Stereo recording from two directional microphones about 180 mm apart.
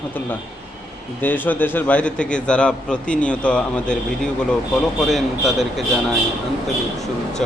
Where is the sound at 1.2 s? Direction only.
10° left (ahead or behind).